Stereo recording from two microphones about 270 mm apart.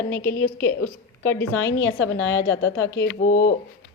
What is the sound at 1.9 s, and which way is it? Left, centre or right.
Speech, left.